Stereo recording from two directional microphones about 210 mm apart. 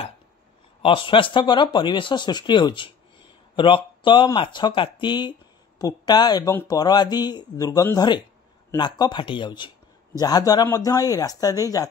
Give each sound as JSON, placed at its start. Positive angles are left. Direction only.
{"t": 0.8, "sound": "speech", "side_deg": 25}